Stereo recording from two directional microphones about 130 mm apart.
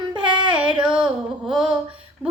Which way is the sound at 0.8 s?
5° right (ahead or behind).